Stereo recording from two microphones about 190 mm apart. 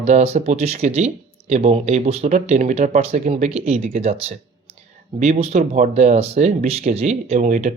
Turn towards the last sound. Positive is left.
turn(degrees=-35)  # may be behind; listen again after turning